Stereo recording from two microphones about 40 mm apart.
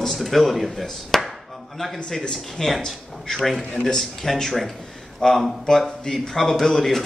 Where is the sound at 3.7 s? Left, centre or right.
Left.